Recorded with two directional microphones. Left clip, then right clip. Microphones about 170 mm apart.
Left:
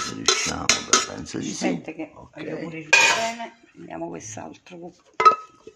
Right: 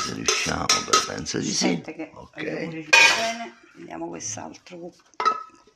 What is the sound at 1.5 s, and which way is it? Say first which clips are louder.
Speech: right 1 dB; 5° right (ahead or behind).